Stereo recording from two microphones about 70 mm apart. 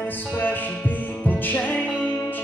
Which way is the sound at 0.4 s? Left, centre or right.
Left.